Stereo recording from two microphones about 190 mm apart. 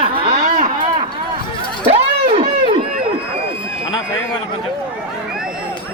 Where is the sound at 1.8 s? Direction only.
30° right (ahead or behind).